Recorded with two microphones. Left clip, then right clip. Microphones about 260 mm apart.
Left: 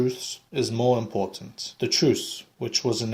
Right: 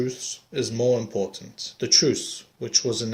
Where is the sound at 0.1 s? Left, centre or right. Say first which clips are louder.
Even; centre.